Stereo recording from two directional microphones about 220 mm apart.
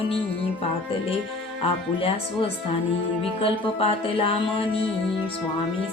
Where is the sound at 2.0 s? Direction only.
25° left (ahead or behind).